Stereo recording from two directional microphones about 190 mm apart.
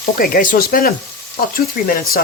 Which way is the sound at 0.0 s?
50° left (ahead or behind).